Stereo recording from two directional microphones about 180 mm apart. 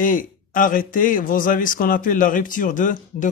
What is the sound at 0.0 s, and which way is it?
Speech, 50° left (ahead or behind).